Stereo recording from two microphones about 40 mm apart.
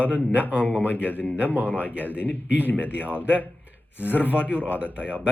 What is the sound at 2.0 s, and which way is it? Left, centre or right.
Speech, left.